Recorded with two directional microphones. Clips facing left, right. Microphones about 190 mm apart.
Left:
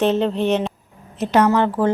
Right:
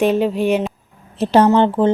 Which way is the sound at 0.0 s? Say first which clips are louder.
Right 2 dB; 10° right (ahead or behind).